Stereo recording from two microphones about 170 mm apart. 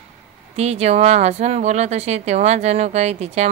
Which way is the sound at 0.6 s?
40° right (ahead or behind).